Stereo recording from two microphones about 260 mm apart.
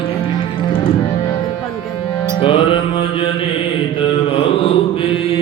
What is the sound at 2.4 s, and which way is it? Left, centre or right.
Music, centre.